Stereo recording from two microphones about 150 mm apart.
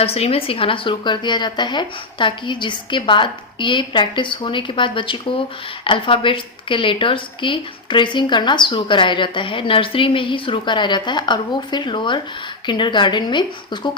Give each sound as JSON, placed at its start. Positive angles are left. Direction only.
{"t": 0.0, "sound": "a woman's voice", "side_deg": 40}